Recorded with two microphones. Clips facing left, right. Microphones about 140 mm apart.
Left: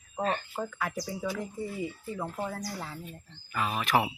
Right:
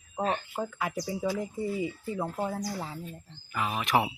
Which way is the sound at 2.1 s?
10° right (ahead or behind).